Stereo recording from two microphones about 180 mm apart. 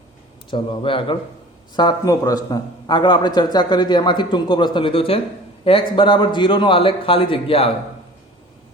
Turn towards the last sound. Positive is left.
turn(degrees=30)  # may be behind; listen again after turning